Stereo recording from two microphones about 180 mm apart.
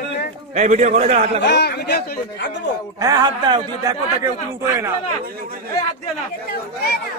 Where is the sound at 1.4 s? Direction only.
70° left (ahead or behind).